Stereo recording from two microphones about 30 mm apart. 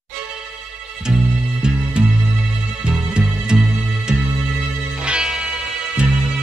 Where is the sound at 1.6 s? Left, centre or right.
Right.